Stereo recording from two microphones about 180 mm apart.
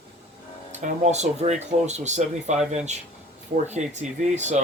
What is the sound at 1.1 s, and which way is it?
Speech, 40° right (ahead or behind).